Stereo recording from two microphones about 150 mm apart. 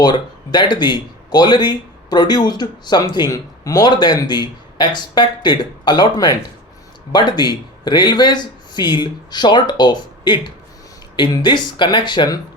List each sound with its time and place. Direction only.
0.0 s speech: 30° left (ahead or behind)